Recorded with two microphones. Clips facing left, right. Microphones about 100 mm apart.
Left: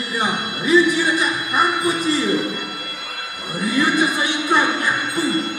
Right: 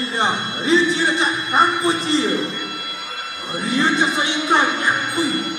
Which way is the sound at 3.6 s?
25° right (ahead or behind).